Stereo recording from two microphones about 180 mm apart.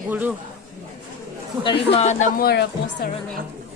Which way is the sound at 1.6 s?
30° left (ahead or behind).